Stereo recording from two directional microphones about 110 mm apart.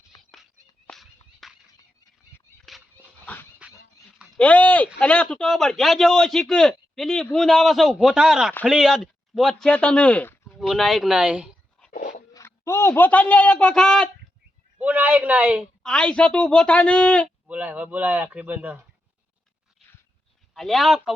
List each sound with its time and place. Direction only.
0.9 s a sound: centre (ahead or behind)
2.7 s dog: centre (ahead or behind)
3.3 s dog: 15° left (ahead or behind)
4.4 s a man's voice: 15° left (ahead or behind)
10.6 s a man's voice: centre (ahead or behind)
12.3 s a man's voice: 25° left (ahead or behind); by 14.1 s 5° left (ahead or behind)
14.8 s a man's voice: 15° right (ahead or behind)
15.8 s speech: 10° left (ahead or behind)
17.4 s a man's voice: 10° right (ahead or behind)
20.5 s a man's voice: centre (ahead or behind)